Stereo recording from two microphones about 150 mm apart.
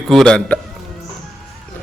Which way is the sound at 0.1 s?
5° left (ahead or behind).